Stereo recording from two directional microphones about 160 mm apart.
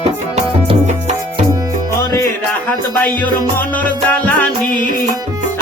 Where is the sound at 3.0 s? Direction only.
10° left (ahead or behind).